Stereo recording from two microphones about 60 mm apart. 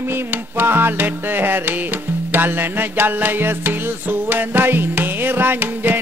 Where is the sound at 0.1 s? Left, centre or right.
Right.